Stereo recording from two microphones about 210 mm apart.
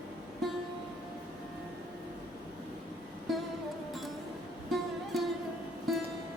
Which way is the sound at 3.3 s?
Centre (ahead or behind).